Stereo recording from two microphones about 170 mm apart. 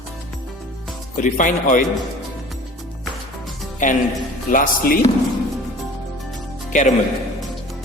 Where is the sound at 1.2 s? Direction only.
50° left (ahead or behind).